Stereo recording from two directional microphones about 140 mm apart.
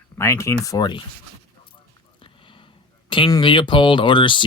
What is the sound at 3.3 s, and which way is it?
Speech, 35° left (ahead or behind).